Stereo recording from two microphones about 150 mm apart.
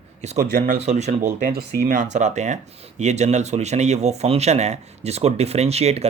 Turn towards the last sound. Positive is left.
turn(degrees=-45)  # may be behind; listen again after turning